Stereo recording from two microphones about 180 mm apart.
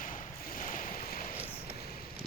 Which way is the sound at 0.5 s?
50° left (ahead or behind).